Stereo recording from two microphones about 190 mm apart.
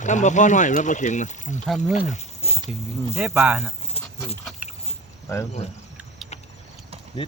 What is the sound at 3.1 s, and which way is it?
Speech, 5° right (ahead or behind).